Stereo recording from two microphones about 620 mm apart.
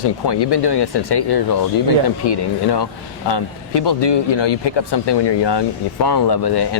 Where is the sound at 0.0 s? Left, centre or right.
Left.